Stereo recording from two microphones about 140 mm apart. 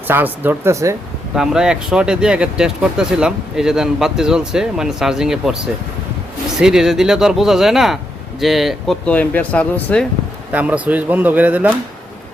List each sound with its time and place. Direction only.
0.1 s speech: 15° right (ahead or behind)
1.4 s speech: 5° right (ahead or behind)
6.6 s speech: 5° right (ahead or behind)
9.0 s speech: 10° left (ahead or behind)
10.5 s speech: 10° right (ahead or behind)